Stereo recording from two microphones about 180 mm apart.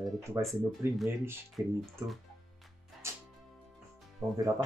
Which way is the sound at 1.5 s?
Centre (ahead or behind).